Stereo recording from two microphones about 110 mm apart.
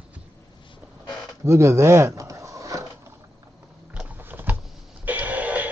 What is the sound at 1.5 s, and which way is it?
Speech, 25° right (ahead or behind).